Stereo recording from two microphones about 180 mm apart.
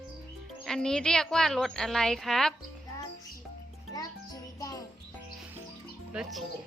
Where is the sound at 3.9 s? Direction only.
20° left (ahead or behind).